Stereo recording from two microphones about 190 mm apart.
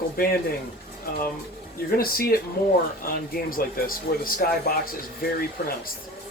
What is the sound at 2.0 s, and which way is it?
Speech, 50° left (ahead or behind).